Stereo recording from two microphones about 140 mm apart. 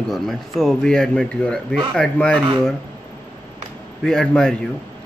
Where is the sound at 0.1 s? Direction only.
Centre (ahead or behind).